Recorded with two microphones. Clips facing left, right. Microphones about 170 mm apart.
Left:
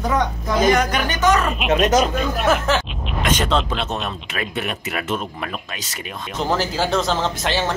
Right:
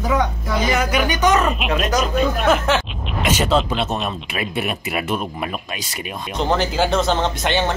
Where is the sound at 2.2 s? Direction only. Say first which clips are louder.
Right 2 dB; centre (ahead or behind).